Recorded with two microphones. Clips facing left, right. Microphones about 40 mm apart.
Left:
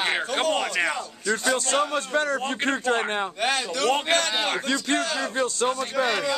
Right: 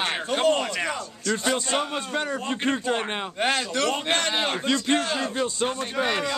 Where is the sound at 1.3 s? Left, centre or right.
Centre.